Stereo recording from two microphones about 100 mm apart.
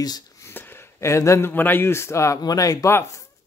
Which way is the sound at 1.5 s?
20° left (ahead or behind).